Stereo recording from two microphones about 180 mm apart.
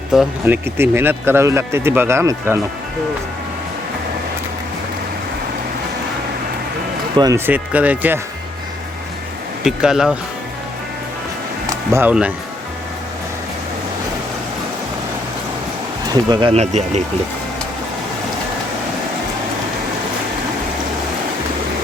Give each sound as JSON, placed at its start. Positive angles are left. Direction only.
{"t": 0.1, "sound": "speech", "side_deg": -5}
{"t": 7.2, "sound": "speech", "side_deg": -15}
{"t": 9.6, "sound": "speech", "side_deg": -5}
{"t": 11.6, "sound": "music", "side_deg": -15}
{"t": 16.3, "sound": "speech", "side_deg": -30}